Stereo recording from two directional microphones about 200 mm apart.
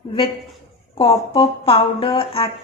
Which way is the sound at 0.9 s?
25° left (ahead or behind).